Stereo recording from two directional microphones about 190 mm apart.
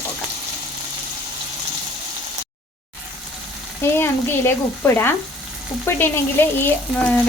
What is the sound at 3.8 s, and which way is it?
Speech, 10° left (ahead or behind).